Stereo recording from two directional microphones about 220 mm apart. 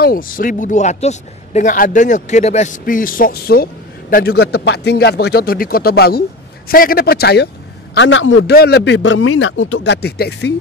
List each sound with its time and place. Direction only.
0.0 s a man's voice: 40° left (ahead or behind); by 8.5 s 60° left (ahead or behind)
8.5 s speech: 50° left (ahead or behind)